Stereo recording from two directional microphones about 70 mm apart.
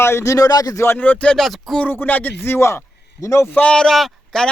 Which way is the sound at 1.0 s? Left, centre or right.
Centre.